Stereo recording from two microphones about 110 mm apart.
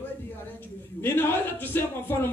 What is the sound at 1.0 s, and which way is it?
A man's voice, 20° left (ahead or behind).